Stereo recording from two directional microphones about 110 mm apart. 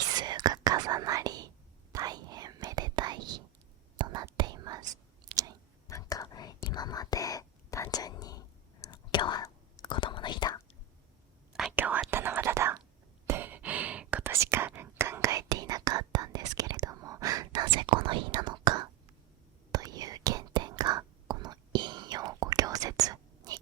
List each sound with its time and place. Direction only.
0.1 s whispering: 40° right (ahead or behind)
5.3 s a sound: 60° right (ahead or behind)
5.9 s whispering: 30° left (ahead or behind)
11.7 s whispering: 15° right (ahead or behind)
14.3 s whispering: 25° right (ahead or behind)